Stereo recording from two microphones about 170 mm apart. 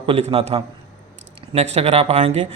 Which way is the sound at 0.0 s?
30° right (ahead or behind).